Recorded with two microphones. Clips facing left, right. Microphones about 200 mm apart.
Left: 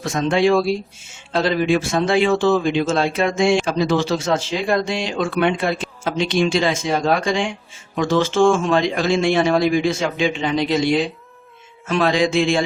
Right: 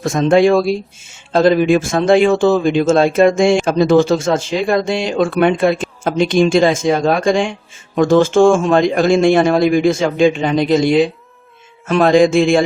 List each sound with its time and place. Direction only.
0.0 s a man's voice: 50° right (ahead or behind)